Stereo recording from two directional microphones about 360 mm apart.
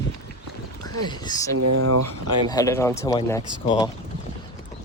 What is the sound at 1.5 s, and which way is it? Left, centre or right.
Speech, right.